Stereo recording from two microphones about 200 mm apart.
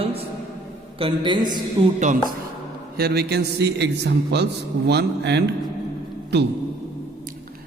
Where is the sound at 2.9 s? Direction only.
50° right (ahead or behind).